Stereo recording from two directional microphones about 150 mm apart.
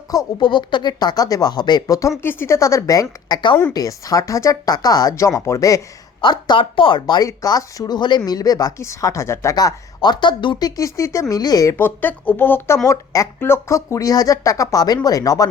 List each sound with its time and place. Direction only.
0.1 s speech: 25° left (ahead or behind)
10.8 s speech: 20° left (ahead or behind)